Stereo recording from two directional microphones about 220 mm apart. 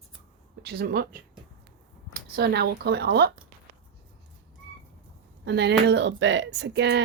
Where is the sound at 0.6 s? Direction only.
45° right (ahead or behind).